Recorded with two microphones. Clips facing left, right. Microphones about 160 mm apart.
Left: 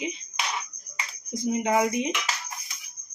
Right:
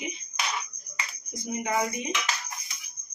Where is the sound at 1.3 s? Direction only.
90° left.